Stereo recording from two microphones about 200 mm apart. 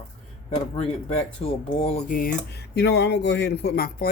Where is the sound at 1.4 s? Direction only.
30° left (ahead or behind).